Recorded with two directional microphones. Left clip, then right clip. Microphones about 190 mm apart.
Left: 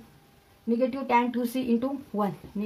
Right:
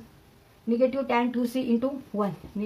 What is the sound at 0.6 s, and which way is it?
Speech, 35° left (ahead or behind).